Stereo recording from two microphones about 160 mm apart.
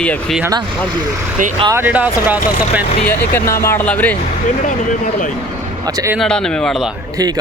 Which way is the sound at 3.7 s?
10° left (ahead or behind).